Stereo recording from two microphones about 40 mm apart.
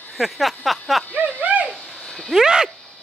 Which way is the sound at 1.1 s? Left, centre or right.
Right.